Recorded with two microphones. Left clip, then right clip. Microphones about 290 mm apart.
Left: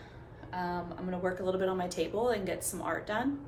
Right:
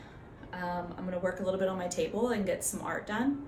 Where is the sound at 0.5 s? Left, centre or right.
Centre.